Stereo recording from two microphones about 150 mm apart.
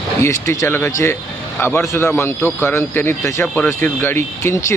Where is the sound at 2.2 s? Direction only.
15° left (ahead or behind).